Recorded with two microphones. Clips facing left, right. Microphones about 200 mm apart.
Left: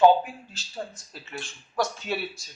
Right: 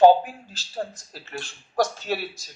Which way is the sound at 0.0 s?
40° right (ahead or behind).